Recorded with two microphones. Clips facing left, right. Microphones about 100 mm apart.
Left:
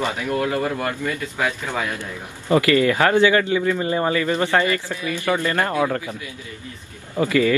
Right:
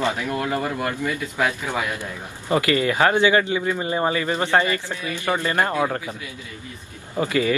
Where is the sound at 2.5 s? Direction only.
25° right (ahead or behind).